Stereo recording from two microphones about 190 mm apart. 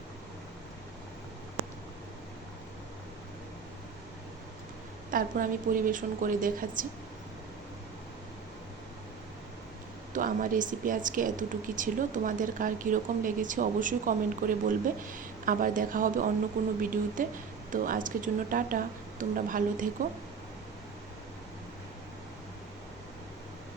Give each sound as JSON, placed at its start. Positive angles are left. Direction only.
{"t": 5.1, "sound": "speech", "side_deg": -45}
{"t": 10.1, "sound": "speech", "side_deg": -45}